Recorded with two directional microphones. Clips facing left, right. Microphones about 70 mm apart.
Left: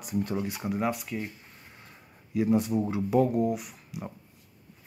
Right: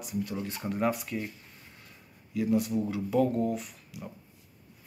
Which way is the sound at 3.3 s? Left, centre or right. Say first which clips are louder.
Left 2 dB; centre.